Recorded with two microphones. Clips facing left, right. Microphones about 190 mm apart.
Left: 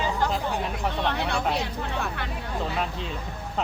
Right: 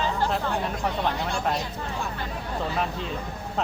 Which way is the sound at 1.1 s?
70° left (ahead or behind).